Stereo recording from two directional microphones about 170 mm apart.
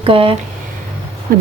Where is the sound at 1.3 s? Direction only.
55° right (ahead or behind).